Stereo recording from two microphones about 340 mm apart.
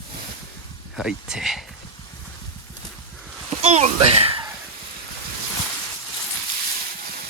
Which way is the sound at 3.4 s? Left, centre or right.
Centre.